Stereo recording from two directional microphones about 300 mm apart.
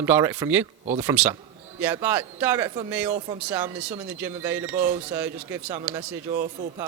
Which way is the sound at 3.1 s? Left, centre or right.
Right.